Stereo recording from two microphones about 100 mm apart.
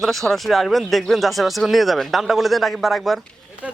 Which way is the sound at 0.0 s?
Centre (ahead or behind).